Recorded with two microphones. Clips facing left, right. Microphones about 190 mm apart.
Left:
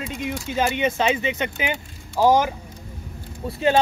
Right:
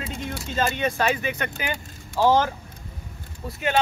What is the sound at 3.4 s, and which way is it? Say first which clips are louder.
Speech: left 4 dB; 30° left (ahead or behind).